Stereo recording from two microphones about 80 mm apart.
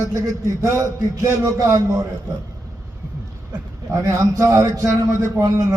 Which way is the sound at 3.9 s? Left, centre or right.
Right.